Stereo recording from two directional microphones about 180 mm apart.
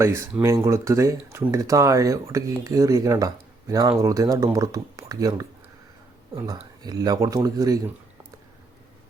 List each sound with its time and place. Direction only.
0.0 s speech: 15° right (ahead or behind)